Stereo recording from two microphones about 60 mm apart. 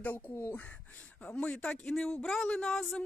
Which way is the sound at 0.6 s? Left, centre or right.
Left.